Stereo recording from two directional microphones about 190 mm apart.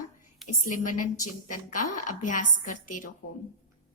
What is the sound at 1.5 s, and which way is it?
A woman's voice, 45° left (ahead or behind).